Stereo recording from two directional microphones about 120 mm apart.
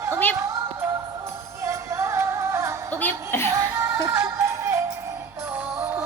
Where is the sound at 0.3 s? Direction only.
20° right (ahead or behind).